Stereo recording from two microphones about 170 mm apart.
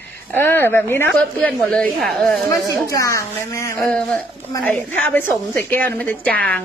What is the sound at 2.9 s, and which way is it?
Speech, 20° left (ahead or behind).